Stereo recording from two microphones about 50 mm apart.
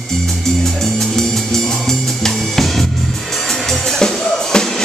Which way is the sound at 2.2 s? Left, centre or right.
Centre.